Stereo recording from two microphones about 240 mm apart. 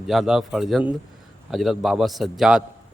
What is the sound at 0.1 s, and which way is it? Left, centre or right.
A man's voice, centre.